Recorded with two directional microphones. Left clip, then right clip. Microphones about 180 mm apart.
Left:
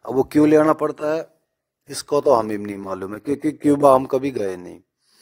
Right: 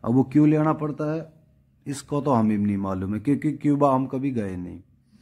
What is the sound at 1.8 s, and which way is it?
A man's voice, 45° left (ahead or behind).